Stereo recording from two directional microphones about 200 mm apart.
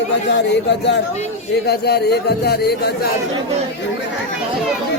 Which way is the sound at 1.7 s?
55° left (ahead or behind).